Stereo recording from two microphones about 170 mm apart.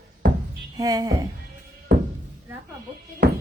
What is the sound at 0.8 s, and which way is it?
Speech, 20° right (ahead or behind).